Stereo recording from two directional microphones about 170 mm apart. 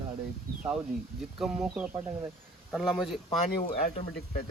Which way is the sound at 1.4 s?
5° right (ahead or behind).